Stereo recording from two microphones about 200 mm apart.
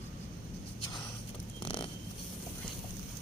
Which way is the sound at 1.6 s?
25° left (ahead or behind).